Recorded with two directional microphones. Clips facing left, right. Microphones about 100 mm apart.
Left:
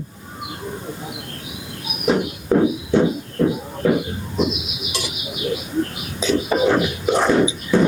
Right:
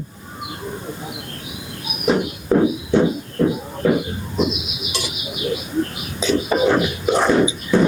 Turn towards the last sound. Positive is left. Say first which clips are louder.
# even
turn(degrees=-20)  # may be behind; listen again after turning